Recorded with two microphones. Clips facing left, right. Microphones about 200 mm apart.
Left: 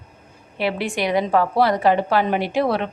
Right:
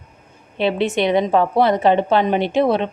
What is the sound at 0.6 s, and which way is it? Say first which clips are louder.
A woman's voice: right 5 dB; 20° right (ahead or behind).